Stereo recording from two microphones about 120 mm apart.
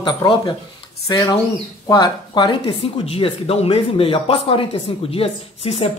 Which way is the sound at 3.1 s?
50° left (ahead or behind).